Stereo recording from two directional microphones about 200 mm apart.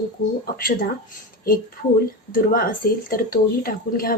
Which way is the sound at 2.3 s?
45° left (ahead or behind).